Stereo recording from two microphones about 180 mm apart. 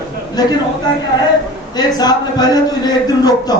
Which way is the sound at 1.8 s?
20° left (ahead or behind).